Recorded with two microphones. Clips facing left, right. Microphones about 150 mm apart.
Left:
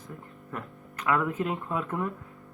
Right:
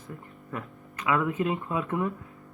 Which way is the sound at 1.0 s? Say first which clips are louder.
Right 1 dB; 5° right (ahead or behind).